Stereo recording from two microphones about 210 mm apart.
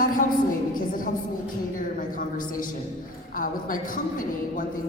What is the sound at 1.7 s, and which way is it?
A woman's voice, 40° left (ahead or behind).